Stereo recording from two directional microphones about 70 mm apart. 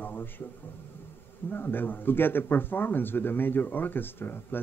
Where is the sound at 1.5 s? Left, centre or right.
Left.